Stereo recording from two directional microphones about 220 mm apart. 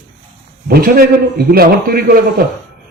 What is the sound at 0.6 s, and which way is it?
A man's voice, 45° right (ahead or behind).